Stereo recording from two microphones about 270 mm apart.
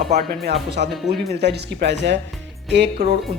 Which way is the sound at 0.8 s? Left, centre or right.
Right.